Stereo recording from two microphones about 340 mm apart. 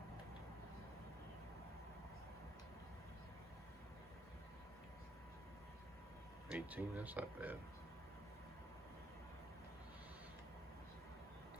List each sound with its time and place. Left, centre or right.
6.5 s speech: centre